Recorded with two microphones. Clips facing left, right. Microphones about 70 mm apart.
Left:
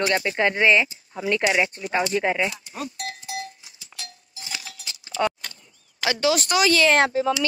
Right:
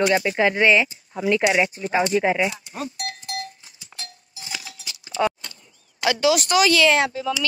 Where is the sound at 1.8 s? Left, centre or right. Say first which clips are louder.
Right 3 dB; right.